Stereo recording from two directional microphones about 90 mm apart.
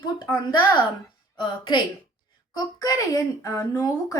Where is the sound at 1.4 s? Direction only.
60° left (ahead or behind).